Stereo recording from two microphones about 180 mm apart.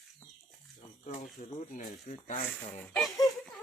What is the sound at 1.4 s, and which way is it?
Speech, 50° left (ahead or behind).